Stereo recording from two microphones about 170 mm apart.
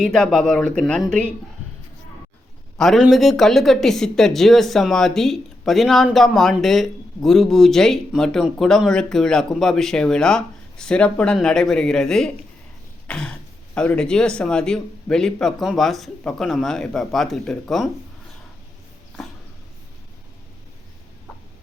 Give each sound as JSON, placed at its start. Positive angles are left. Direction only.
{"t": 0.0, "sound": "speech", "side_deg": 5}
{"t": 2.7, "sound": "speech", "side_deg": 0}